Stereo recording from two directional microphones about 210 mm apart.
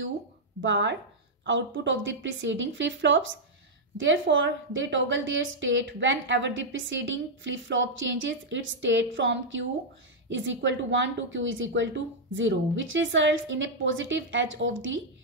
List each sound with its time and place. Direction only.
0.6 s a woman's voice: 60° right (ahead or behind)